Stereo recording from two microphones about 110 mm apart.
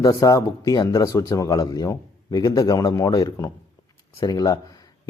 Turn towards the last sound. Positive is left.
turn(degrees=35)  # may be behind; listen again after turning